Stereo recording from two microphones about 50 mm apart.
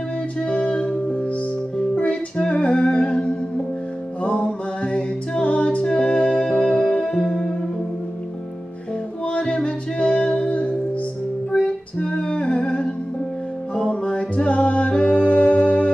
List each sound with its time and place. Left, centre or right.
0.4 s music: left
9.2 s music: left